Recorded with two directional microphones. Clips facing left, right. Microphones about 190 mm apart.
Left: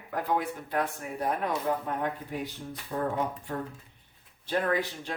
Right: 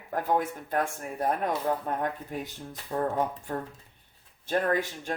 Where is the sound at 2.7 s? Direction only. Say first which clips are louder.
Right 2 dB; 45° right (ahead or behind).